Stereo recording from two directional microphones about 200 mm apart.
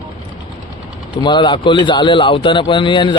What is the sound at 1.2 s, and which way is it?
A man's voice, 20° left (ahead or behind).